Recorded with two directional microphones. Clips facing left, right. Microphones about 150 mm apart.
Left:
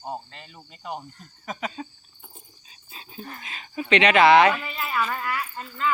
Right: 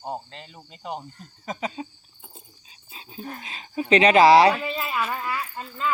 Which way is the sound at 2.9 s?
20° right (ahead or behind).